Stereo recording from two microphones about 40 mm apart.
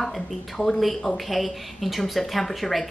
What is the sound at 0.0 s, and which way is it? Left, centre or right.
A woman's voice, centre.